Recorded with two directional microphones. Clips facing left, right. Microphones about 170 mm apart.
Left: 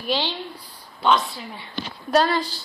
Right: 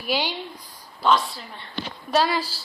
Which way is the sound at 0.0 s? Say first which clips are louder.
Left 1 dB; 10° right (ahead or behind).